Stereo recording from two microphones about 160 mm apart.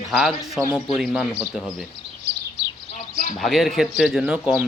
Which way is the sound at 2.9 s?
50° left (ahead or behind).